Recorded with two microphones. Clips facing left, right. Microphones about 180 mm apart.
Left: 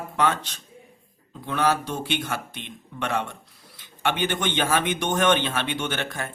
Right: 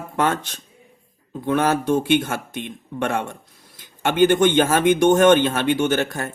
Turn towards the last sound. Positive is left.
turn(degrees=-40)  # may be behind; listen again after turning